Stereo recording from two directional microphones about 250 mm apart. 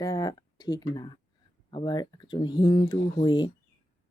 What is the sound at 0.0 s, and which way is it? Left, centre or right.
A woman's voice, centre.